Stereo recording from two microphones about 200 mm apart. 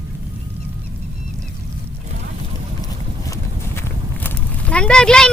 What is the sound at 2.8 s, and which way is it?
Clip-clop, 15° left (ahead or behind).